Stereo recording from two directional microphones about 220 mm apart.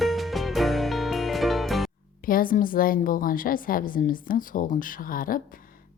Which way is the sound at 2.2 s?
40° left (ahead or behind).